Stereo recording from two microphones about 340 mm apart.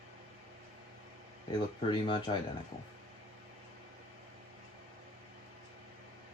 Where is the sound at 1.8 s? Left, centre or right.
Centre.